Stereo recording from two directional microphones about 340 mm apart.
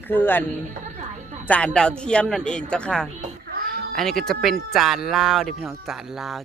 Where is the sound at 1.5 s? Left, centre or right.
Centre.